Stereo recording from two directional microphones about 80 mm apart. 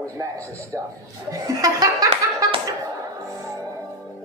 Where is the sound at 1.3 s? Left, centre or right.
Right.